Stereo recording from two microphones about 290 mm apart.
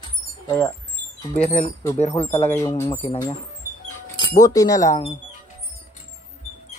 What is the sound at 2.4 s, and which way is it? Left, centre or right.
Speech, centre.